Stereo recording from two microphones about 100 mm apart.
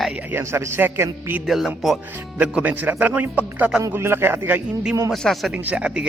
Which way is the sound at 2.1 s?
20° right (ahead or behind).